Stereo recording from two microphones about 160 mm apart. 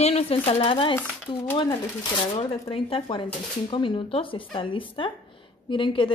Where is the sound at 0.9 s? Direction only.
10° left (ahead or behind).